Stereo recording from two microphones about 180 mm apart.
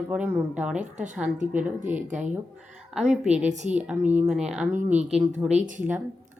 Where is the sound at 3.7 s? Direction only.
10° right (ahead or behind).